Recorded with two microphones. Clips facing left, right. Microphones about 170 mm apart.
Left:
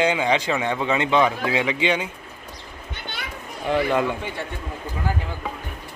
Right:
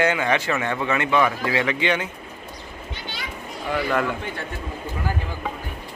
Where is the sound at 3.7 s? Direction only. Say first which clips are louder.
Left 2 dB; 20° left (ahead or behind).